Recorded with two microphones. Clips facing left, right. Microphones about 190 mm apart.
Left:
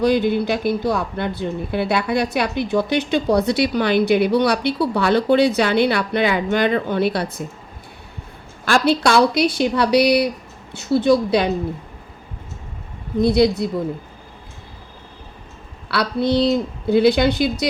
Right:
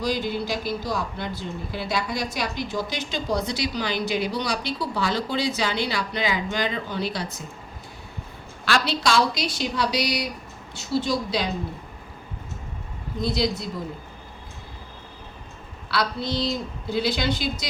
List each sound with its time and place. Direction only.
0.0 s speech: 60° left (ahead or behind)
8.6 s speech: 50° left (ahead or behind)
13.2 s speech: 60° left (ahead or behind)
15.9 s speech: 60° left (ahead or behind)